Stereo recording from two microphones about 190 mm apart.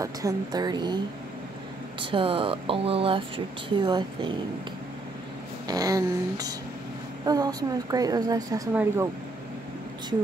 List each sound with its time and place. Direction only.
0.0 s speech: 20° right (ahead or behind)
5.7 s speech: 20° right (ahead or behind)